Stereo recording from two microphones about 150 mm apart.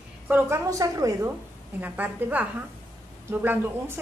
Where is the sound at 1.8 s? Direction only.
10° right (ahead or behind).